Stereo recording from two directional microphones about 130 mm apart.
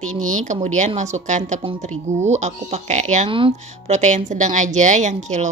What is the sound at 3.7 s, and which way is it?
A woman's voice, 65° right (ahead or behind).